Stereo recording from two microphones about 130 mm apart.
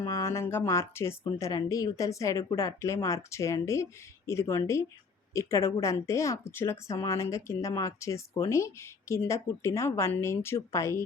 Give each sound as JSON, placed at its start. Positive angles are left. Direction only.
{"t": 0.0, "sound": "speech", "side_deg": 20}